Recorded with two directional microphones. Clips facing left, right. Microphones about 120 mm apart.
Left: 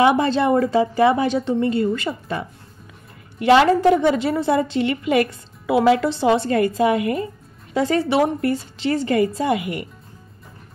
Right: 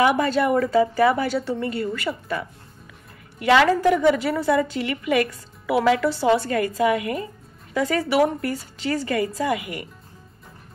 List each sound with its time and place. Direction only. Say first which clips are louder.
0.0 s a woman's voice: left 3 dB; 25° left (ahead or behind)